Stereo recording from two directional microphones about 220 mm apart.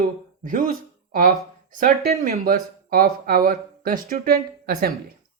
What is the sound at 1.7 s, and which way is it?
Speech, 35° right (ahead or behind).